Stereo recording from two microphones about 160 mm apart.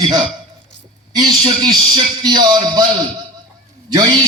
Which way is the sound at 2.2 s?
25° right (ahead or behind).